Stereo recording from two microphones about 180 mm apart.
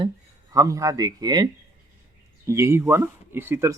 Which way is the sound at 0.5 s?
20° right (ahead or behind).